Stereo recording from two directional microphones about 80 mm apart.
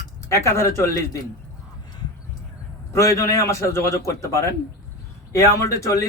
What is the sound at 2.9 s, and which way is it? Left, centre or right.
Speech, left.